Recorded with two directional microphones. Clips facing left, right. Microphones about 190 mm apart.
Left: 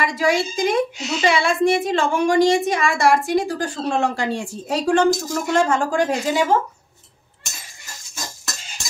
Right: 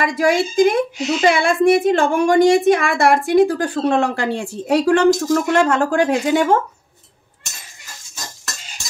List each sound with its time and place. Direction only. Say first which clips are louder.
0.0 s a woman's voice: right 3 dB; 50° right (ahead or behind)